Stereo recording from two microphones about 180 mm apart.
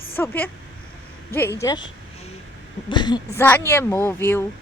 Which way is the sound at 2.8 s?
25° left (ahead or behind).